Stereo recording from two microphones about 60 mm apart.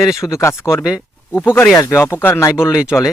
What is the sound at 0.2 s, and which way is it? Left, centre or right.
Speech, left.